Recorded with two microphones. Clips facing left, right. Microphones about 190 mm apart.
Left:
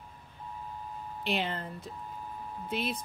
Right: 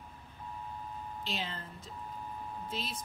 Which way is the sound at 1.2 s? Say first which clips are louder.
Left 9 dB; 65° left (ahead or behind).